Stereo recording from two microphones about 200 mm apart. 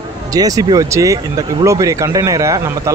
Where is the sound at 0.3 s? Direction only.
15° right (ahead or behind).